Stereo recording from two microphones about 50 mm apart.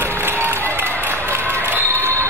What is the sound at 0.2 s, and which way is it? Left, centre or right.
Applause, right.